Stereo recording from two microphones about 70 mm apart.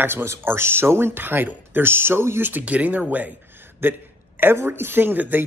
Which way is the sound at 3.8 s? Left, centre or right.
Right.